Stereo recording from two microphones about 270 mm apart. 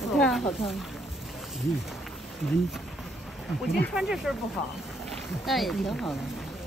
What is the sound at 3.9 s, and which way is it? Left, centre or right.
Speech, centre.